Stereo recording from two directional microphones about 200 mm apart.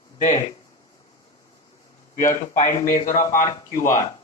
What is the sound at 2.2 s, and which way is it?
A man's voice, 40° left (ahead or behind).